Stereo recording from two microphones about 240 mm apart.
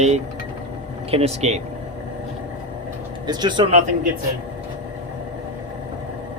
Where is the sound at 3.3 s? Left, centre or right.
Centre.